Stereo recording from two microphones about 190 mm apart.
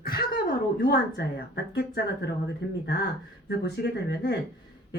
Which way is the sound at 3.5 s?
60° left (ahead or behind).